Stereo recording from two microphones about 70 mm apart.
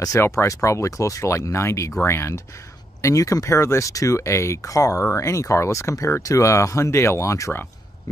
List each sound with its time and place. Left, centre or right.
0.2 s speech: left